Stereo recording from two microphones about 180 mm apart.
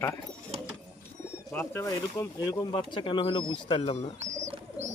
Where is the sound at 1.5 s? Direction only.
10° left (ahead or behind); by 4.1 s 30° left (ahead or behind).